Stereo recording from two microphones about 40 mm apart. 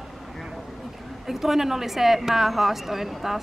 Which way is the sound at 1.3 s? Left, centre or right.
Centre.